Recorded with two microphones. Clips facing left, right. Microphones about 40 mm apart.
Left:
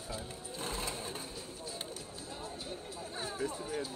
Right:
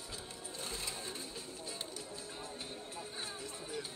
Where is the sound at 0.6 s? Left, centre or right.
Left.